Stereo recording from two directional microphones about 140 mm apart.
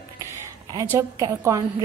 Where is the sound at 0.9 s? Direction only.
25° right (ahead or behind).